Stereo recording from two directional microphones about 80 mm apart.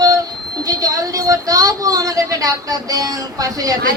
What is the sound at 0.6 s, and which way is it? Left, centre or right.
A woman's voice, right.